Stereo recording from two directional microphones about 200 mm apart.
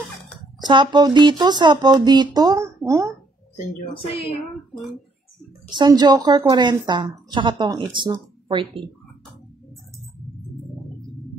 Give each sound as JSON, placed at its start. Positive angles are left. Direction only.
{"t": 0.7, "sound": "a woman's voice", "side_deg": -20}
{"t": 5.7, "sound": "a woman's voice", "side_deg": -20}